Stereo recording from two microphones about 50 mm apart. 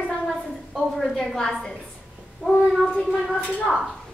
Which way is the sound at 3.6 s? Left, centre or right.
Centre.